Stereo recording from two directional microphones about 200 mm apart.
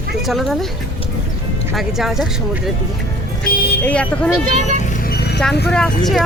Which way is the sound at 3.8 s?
5° left (ahead or behind).